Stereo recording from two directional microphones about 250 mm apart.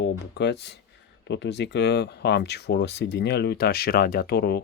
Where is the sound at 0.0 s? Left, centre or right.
Left.